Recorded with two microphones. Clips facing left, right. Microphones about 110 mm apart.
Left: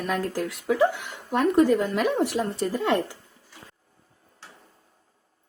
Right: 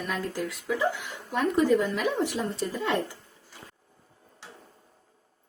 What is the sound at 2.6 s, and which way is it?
Speech, 50° left (ahead or behind).